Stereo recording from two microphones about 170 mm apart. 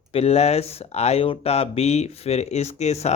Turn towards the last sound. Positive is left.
turn(degrees=40)  # may be behind; listen again after turning